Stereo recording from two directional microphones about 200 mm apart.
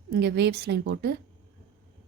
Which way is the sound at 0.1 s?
55° right (ahead or behind).